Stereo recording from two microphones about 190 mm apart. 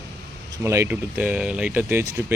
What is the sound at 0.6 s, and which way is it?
Speech, 15° right (ahead or behind).